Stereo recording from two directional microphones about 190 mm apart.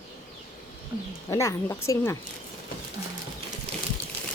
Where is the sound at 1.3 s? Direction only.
15° left (ahead or behind).